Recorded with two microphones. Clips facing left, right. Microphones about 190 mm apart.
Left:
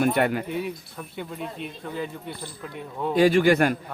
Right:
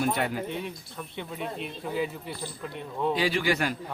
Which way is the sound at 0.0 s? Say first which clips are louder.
Left 6 dB; 60° left (ahead or behind).